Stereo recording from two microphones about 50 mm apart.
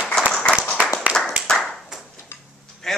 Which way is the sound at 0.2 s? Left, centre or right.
Centre.